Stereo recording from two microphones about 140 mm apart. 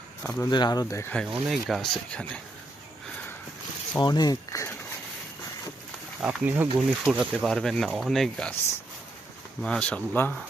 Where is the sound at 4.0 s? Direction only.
30° left (ahead or behind).